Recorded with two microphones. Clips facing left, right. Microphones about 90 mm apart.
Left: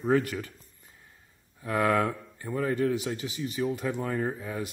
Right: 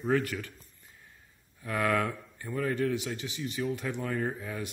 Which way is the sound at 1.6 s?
25° left (ahead or behind).